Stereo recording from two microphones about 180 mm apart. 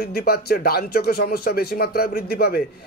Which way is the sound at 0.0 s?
60° left (ahead or behind).